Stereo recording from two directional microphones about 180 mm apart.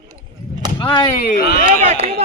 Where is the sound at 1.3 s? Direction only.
60° left (ahead or behind).